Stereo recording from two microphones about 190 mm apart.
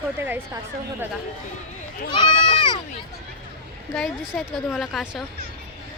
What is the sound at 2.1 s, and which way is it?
Speech, 25° left (ahead or behind).